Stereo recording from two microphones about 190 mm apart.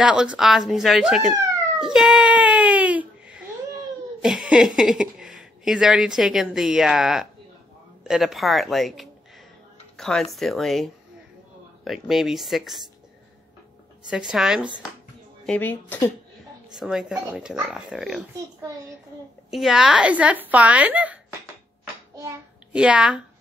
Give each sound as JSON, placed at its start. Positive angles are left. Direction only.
{"t": 0.0, "sound": "speech", "side_deg": -5}
{"t": 14.1, "sound": "a woman's voice", "side_deg": -5}
{"t": 16.7, "sound": "speech", "side_deg": -5}
{"t": 19.5, "sound": "speech", "side_deg": -5}
{"t": 22.1, "sound": "child singing", "side_deg": -15}
{"t": 22.8, "sound": "speech", "side_deg": -5}